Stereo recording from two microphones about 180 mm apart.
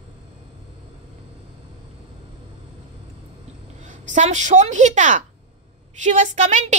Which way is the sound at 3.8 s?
45° right (ahead or behind).